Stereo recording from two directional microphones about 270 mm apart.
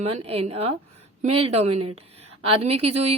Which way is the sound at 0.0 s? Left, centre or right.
Right.